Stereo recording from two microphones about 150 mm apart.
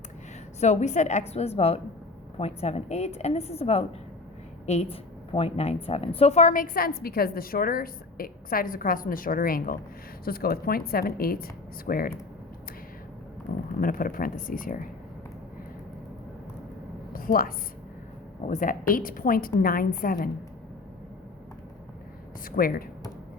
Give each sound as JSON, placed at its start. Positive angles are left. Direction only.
{"t": 0.6, "sound": "a woman's voice", "side_deg": 50}
{"t": 10.2, "sound": "a woman's voice", "side_deg": 90}
{"t": 13.7, "sound": "a woman's voice", "side_deg": 70}
{"t": 17.1, "sound": "a sound", "side_deg": 70}
{"t": 18.4, "sound": "a woman's voice", "side_deg": 60}
{"t": 22.4, "sound": "a woman's voice", "side_deg": 70}